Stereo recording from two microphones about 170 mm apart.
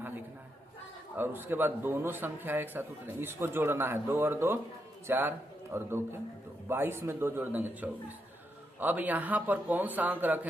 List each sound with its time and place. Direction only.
1.1 s speech: 10° right (ahead or behind)